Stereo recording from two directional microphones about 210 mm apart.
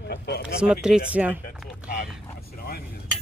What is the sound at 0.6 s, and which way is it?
Speech, 5° right (ahead or behind).